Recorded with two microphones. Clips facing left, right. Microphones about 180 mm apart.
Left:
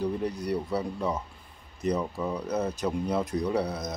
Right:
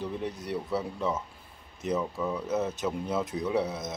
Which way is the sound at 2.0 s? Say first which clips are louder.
Even; 15° left (ahead or behind).